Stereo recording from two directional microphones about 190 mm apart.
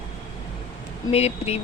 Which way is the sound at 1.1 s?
35° left (ahead or behind).